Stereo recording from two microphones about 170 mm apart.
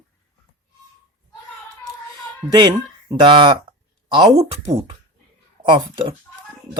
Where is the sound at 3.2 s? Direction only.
30° right (ahead or behind).